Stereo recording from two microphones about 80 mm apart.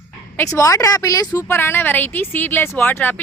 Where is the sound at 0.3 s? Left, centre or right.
Left.